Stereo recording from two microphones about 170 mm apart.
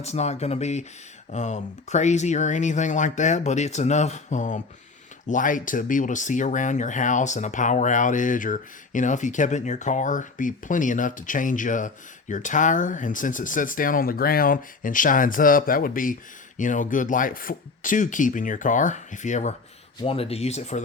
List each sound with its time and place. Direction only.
0.0 s speech: 40° left (ahead or behind)